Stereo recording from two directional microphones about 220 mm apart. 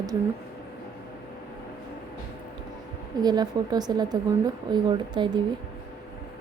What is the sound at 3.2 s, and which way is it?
A woman's voice, 20° right (ahead or behind).